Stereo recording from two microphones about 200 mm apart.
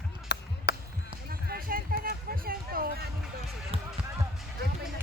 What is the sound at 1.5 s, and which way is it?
Speech, 45° right (ahead or behind).